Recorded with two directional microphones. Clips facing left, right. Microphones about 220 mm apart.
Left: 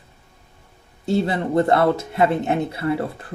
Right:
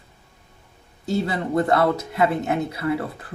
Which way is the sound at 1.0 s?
25° left (ahead or behind).